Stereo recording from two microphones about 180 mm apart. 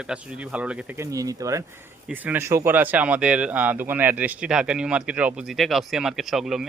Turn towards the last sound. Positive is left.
turn(degrees=0)  # may be behind; listen again after turning